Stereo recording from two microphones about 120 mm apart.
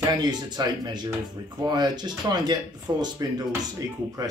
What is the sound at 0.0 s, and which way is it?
Speech, 35° right (ahead or behind).